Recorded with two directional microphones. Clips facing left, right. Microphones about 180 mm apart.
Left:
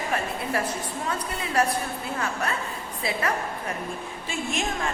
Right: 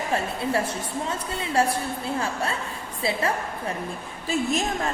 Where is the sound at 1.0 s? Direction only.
25° right (ahead or behind).